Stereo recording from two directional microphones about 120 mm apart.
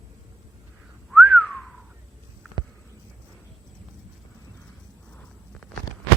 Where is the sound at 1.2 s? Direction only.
10° left (ahead or behind).